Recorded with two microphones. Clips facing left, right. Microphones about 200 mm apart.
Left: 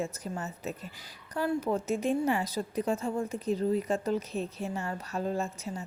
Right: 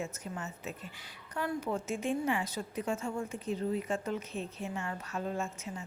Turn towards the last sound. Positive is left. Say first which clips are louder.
# left 4 dB
turn(degrees=35)  # may be behind; listen again after turning